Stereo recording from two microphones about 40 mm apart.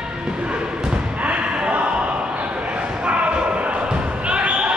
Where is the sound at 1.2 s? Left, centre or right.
Right.